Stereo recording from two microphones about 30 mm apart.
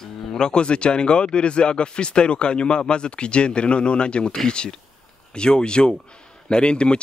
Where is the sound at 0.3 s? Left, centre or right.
Left.